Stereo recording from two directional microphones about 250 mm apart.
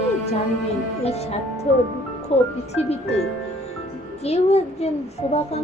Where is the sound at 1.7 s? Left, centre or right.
Left.